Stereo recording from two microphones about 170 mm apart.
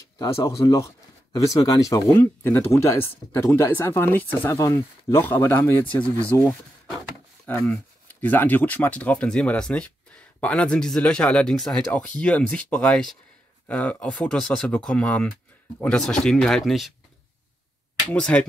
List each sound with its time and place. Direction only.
0.2 s speech: 20° left (ahead or behind); by 16.9 s centre (ahead or behind)
18.1 s speech: 5° left (ahead or behind)